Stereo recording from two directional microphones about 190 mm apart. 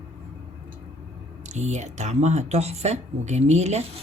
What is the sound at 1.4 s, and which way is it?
Speech, 35° right (ahead or behind).